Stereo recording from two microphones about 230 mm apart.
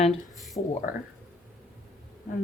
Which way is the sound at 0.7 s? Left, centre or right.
Left.